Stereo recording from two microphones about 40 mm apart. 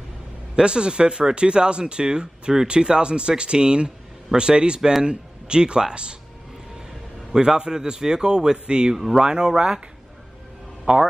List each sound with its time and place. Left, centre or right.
0.6 s speech: right
7.3 s a man's voice: centre
8.9 s a man's voice: centre
10.9 s a man's voice: centre